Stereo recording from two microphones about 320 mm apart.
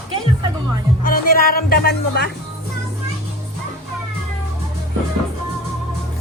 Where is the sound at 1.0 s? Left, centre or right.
Left.